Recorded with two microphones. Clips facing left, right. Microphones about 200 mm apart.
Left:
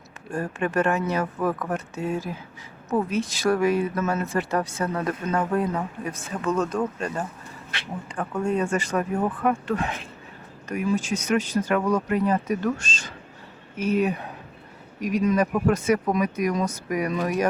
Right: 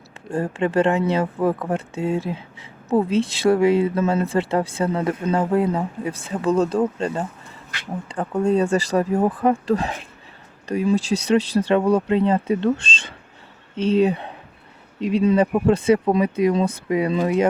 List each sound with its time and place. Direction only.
0.3 s speech: 25° right (ahead or behind)
13.7 s speech: 30° right (ahead or behind)